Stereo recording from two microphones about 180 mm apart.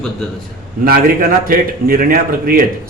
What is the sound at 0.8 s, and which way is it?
A man's voice, 55° right (ahead or behind).